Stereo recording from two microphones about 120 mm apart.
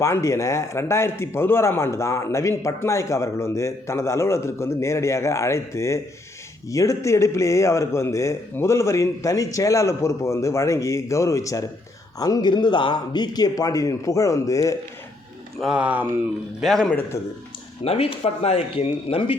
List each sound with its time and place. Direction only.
0.0 s speech: 25° left (ahead or behind)
15.6 s speech: 10° right (ahead or behind)
16.6 s a man's voice: centre (ahead or behind)
17.8 s speech: 50° left (ahead or behind)